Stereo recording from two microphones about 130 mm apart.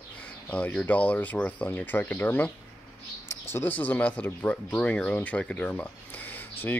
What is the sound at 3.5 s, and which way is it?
Speech, 15° left (ahead or behind).